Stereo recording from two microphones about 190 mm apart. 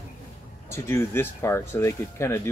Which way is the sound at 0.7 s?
15° left (ahead or behind).